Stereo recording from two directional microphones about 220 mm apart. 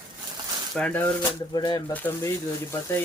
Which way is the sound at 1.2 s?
20° left (ahead or behind).